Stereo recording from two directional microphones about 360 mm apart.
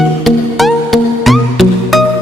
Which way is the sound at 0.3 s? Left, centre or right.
Centre.